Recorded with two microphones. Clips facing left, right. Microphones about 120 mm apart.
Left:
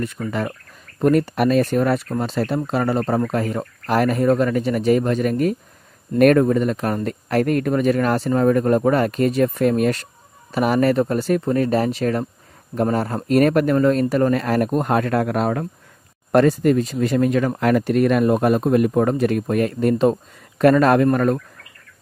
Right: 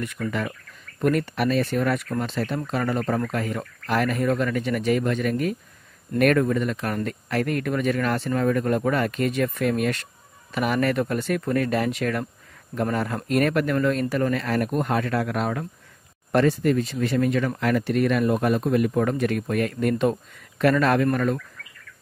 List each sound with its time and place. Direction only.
0.3 s speech: 35° left (ahead or behind)